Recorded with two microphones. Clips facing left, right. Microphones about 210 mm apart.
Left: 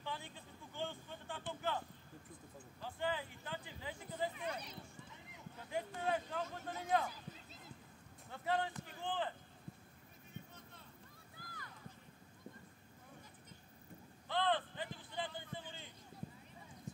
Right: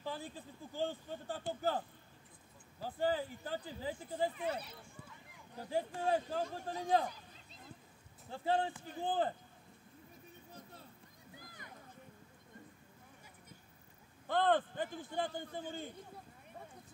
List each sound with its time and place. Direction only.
0.0 s a sound: 35° right (ahead or behind)
0.7 s speech: 35° right (ahead or behind)
4.4 s speech: 5° right (ahead or behind)
5.6 s speech: 30° right (ahead or behind)
8.3 s speech: 30° right (ahead or behind)
11.3 s a sound: 20° right (ahead or behind)
14.2 s a man's voice: 50° right (ahead or behind)